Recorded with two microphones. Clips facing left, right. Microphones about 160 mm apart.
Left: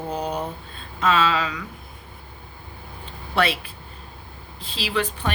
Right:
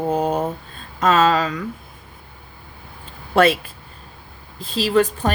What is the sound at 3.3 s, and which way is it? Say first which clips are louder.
Speech: right 7 dB; 45° right (ahead or behind).